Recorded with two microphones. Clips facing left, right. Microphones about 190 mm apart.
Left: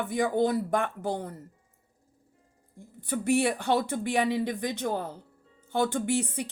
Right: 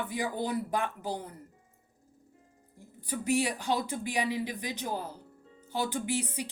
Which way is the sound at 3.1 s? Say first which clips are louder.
Left 4 dB; 60° left (ahead or behind).